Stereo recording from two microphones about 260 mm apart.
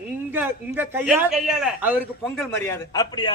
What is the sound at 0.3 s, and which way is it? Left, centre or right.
A man's voice, centre.